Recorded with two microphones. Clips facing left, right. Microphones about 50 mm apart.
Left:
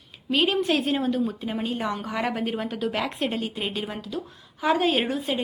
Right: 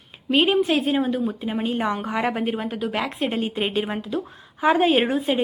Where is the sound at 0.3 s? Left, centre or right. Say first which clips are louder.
Right 4 dB; right.